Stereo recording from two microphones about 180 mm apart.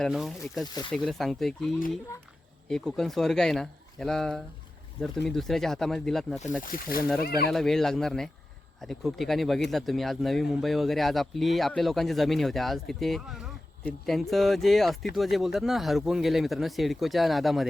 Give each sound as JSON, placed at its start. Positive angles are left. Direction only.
{"t": 0.0, "sound": "speech", "side_deg": 0}
{"t": 0.7, "sound": "speech", "side_deg": 25}
{"t": 0.9, "sound": "speech", "side_deg": 0}
{"t": 6.6, "sound": "speech", "side_deg": 50}
{"t": 7.5, "sound": "speech", "side_deg": 0}